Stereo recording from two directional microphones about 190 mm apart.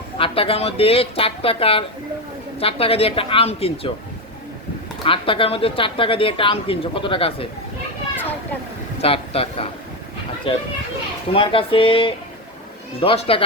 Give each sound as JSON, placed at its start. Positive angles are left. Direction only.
{"t": 0.2, "sound": "speech", "side_deg": 30}
{"t": 5.0, "sound": "speech", "side_deg": 25}
{"t": 9.0, "sound": "speech", "side_deg": 30}